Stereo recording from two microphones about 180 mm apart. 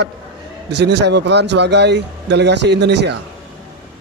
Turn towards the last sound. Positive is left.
turn(degrees=-70)  # may be behind; listen again after turning